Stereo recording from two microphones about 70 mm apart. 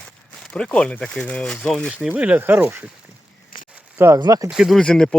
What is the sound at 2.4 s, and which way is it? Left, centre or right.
Speech, right.